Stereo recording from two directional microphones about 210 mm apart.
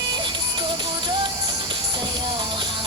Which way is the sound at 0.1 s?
20° right (ahead or behind).